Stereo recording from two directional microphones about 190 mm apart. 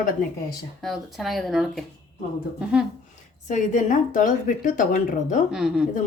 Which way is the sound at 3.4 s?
40° left (ahead or behind).